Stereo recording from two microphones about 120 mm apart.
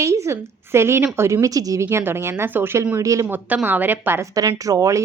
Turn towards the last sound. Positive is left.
turn(degrees=-25)  # may be behind; listen again after turning